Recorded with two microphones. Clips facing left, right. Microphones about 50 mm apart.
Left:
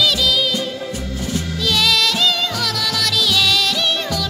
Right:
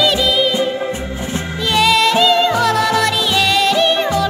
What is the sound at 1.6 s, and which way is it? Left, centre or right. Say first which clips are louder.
Music: right 5 dB; right.